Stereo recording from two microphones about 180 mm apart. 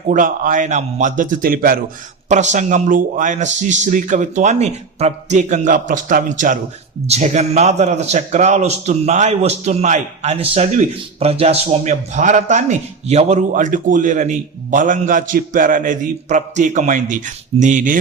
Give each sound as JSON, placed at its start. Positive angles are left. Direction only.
{"t": 0.1, "sound": "a man's voice", "side_deg": -50}
{"t": 2.3, "sound": "a man's voice", "side_deg": -40}